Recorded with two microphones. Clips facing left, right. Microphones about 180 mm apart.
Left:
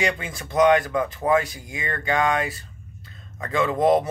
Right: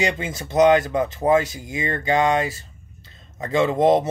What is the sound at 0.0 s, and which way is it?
Speech, 25° right (ahead or behind).